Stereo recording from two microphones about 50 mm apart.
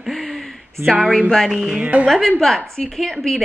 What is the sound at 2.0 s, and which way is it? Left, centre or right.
A woman's voice, centre.